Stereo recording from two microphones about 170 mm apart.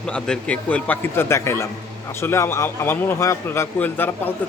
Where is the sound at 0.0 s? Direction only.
5° left (ahead or behind).